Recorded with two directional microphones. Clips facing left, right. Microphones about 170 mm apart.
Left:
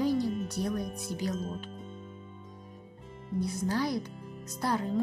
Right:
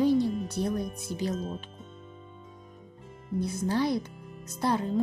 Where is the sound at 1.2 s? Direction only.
25° right (ahead or behind).